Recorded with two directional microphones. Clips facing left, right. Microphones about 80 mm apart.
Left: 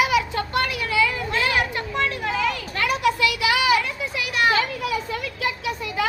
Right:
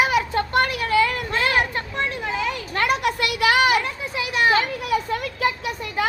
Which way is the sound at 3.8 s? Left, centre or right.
Right.